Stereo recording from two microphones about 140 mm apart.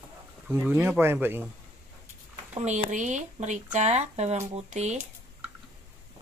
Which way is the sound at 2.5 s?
55° right (ahead or behind).